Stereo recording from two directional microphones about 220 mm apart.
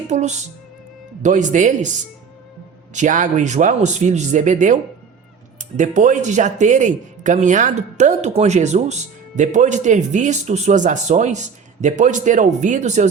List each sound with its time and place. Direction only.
0.1 s speech: 30° right (ahead or behind)
2.9 s speech: 35° right (ahead or behind)